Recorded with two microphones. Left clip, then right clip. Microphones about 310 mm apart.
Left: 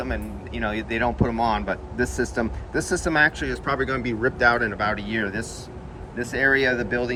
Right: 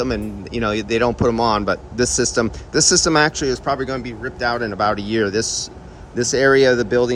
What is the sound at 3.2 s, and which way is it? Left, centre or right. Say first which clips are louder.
Speech: right 4 dB; centre.